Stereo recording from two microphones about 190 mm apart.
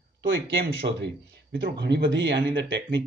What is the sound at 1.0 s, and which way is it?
Speech, 65° right (ahead or behind).